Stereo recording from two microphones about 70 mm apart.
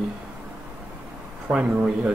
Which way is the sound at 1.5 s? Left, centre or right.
Centre.